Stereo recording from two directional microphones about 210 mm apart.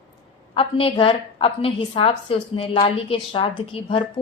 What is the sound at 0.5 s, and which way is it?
A woman's voice, 25° left (ahead or behind).